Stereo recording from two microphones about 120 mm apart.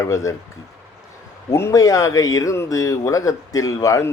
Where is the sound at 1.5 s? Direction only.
25° left (ahead or behind).